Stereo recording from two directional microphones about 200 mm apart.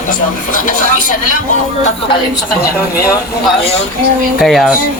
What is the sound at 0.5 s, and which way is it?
Speech, 40° left (ahead or behind).